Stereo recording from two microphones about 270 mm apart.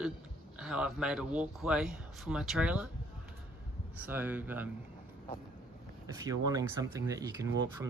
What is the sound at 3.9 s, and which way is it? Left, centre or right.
Speech, centre.